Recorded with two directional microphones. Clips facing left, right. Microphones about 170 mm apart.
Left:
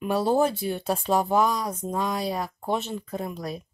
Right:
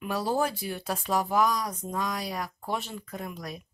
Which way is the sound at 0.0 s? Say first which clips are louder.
Left 6 dB; 25° left (ahead or behind).